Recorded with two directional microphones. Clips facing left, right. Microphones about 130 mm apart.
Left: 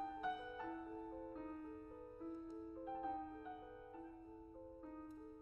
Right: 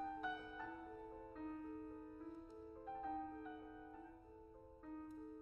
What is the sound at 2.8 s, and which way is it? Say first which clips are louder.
Music: left 2 dB; 10° left (ahead or behind).